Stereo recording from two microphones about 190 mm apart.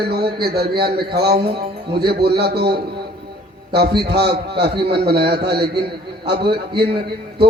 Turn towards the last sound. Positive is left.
turn(degrees=-60)  # may be behind; listen again after turning